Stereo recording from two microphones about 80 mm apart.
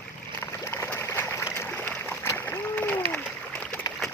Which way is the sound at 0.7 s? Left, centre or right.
Left.